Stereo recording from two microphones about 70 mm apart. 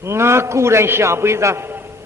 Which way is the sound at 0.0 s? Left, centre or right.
Right.